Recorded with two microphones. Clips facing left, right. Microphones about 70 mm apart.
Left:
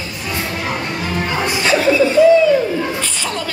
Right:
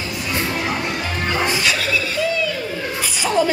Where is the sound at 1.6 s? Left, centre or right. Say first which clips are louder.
Left 8 dB; left.